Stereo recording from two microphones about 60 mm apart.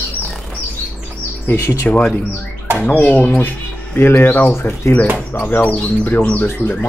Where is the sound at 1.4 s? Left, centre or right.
Left.